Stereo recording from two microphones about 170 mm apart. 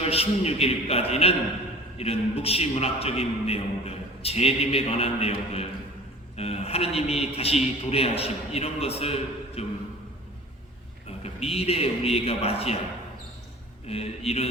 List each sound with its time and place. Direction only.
0.0 s a man's voice: 35° left (ahead or behind)
11.2 s a man's voice: 35° left (ahead or behind)
13.8 s a man's voice: 35° left (ahead or behind)